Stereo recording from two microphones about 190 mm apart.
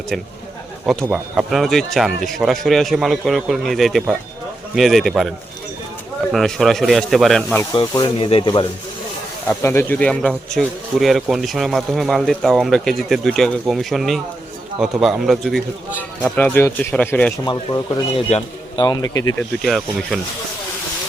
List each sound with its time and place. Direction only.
1.1 s speech: centre (ahead or behind)
6.3 s speech: centre (ahead or behind)
7.7 s speech: 25° left (ahead or behind)
9.5 s speech: 15° left (ahead or behind); by 16.3 s centre (ahead or behind)
16.3 s speech: 10° left (ahead or behind)
17.4 s speech: 25° left (ahead or behind)
19.4 s speech: centre (ahead or behind)